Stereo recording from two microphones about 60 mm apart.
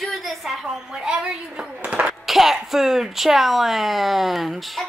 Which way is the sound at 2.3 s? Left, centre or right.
Centre.